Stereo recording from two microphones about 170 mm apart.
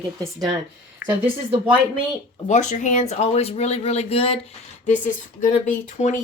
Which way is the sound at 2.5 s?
45° left (ahead or behind).